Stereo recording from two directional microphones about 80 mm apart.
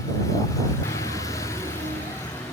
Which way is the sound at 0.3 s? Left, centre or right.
Left.